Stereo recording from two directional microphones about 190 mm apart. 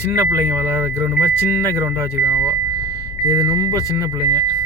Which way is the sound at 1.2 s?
10° left (ahead or behind).